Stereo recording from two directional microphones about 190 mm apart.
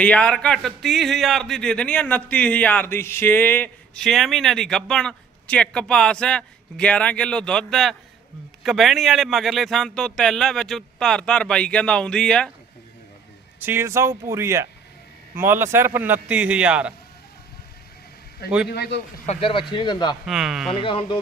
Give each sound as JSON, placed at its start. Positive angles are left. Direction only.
{"t": 0.0, "sound": "speech", "side_deg": 5}
{"t": 13.6, "sound": "a man's voice", "side_deg": -10}
{"t": 18.7, "sound": "speech", "side_deg": 60}
{"t": 19.2, "sound": "speech", "side_deg": 35}
{"t": 20.2, "sound": "speech", "side_deg": 0}
{"t": 20.7, "sound": "speech", "side_deg": 30}